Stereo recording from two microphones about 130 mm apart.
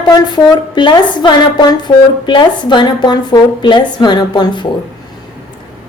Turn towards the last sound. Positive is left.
turn(degrees=35)  # may be behind; listen again after turning